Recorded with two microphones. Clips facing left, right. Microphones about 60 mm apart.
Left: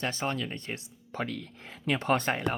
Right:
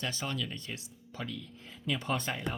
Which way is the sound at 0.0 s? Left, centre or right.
Left.